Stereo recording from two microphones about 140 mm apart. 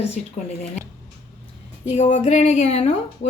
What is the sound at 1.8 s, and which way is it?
A woman's voice, 60° left (ahead or behind).